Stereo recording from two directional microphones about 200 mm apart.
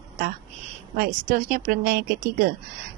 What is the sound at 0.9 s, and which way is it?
A woman's voice, 45° right (ahead or behind).